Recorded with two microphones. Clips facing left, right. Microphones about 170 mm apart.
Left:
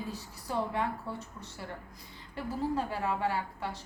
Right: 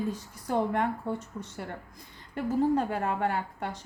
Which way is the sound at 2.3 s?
55° right (ahead or behind).